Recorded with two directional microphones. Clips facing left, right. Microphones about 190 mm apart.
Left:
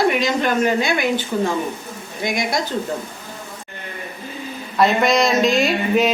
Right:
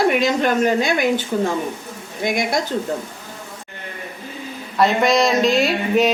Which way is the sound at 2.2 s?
55° right (ahead or behind).